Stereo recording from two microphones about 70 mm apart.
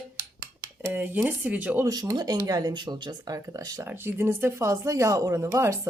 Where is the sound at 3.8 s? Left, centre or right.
Right.